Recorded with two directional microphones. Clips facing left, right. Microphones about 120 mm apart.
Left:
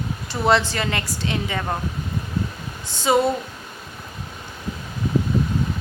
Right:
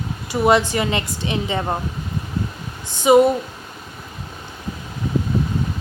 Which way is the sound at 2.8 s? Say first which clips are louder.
Right 6 dB; 15° right (ahead or behind).